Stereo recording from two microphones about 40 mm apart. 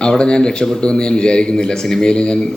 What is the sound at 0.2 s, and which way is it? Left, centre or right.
Speech, left.